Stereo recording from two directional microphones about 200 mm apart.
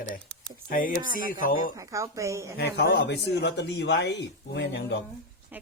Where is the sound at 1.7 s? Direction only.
15° right (ahead or behind).